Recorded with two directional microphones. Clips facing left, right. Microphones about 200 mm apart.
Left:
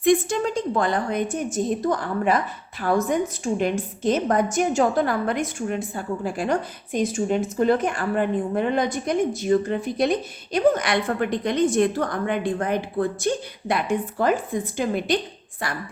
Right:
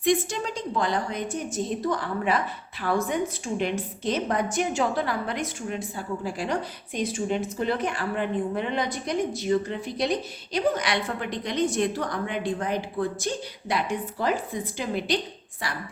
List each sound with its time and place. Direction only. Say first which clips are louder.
0.0 s a woman's voice: left 5 dB; 50° left (ahead or behind)